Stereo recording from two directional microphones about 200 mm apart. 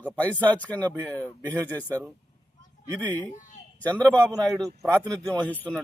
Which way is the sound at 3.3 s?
40° left (ahead or behind).